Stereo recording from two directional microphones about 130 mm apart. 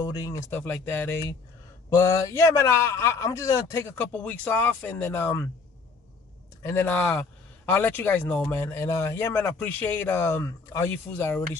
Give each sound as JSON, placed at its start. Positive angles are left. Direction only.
{"t": 0.0, "sound": "a man's voice", "side_deg": 25}
{"t": 6.6, "sound": "a man's voice", "side_deg": 20}